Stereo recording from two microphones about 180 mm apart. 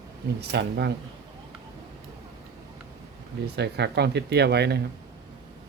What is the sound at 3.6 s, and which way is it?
Speech, 65° right (ahead or behind).